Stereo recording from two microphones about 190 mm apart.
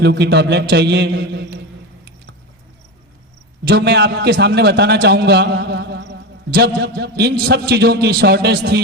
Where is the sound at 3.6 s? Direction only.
60° right (ahead or behind).